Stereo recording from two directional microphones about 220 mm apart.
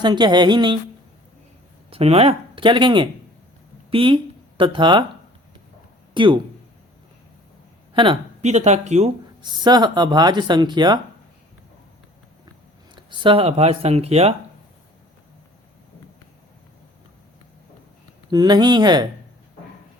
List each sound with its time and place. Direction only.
0.0 s speech: 20° right (ahead or behind)
1.9 s speech: 25° right (ahead or behind)
6.1 s speech: 20° right (ahead or behind)
7.9 s speech: 25° right (ahead or behind)
9.4 s speech: 20° right (ahead or behind)
13.0 s speech: 20° right (ahead or behind)
18.3 s speech: 20° right (ahead or behind)